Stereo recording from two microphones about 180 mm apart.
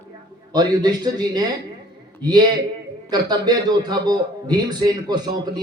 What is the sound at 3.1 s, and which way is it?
A man's voice, 20° right (ahead or behind).